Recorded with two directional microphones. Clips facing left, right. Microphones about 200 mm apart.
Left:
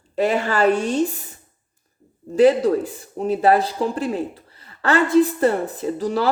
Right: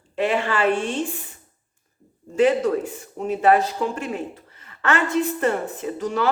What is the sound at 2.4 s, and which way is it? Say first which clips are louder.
A woman's voice: left 4 dB; 35° left (ahead or behind).